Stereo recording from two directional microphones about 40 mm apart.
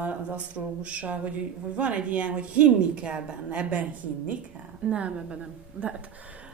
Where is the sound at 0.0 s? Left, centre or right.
Right.